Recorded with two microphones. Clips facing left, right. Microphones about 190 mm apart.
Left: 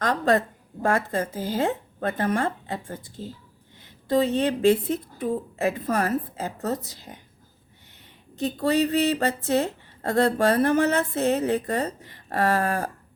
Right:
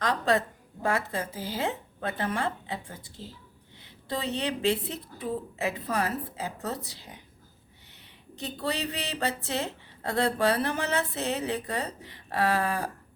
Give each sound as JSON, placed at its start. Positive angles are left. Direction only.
{"t": 0.0, "sound": "a woman's voice", "side_deg": 45}
{"t": 8.4, "sound": "a woman's voice", "side_deg": 45}